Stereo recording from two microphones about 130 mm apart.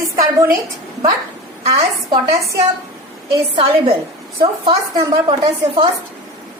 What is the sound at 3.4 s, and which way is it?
Speech, 45° right (ahead or behind).